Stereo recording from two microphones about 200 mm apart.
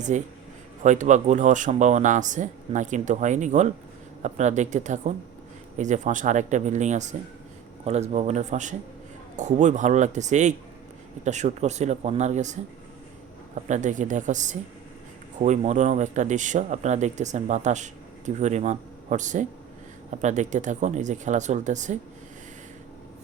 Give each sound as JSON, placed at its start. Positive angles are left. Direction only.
{"t": 0.1, "sound": "speech", "side_deg": -35}
{"t": 13.7, "sound": "speech", "side_deg": -40}